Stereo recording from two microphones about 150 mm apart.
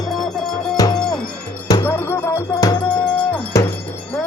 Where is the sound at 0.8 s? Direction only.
25° left (ahead or behind).